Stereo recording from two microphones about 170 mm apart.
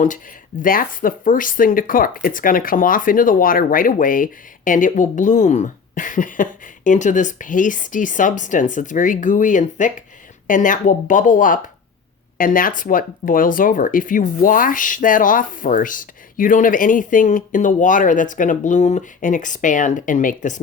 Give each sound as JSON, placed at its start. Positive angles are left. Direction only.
{"t": 0.6, "sound": "speech", "side_deg": 55}